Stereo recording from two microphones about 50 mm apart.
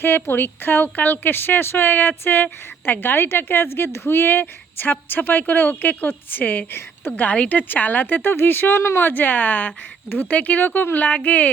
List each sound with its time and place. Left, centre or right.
0.0 s a woman's voice: left
6.7 s a woman's voice: left
7.2 s a woman's voice: left
8.8 s speech: left
9.0 s a woman's voice: left